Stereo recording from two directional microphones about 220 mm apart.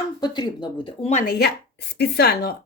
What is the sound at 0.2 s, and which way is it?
Speech, 20° left (ahead or behind).